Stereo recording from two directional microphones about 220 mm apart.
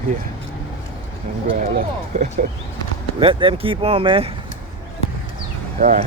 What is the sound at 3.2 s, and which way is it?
Speech, 25° right (ahead or behind).